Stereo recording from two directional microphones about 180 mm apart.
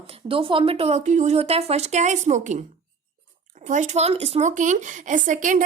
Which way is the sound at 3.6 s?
40° right (ahead or behind).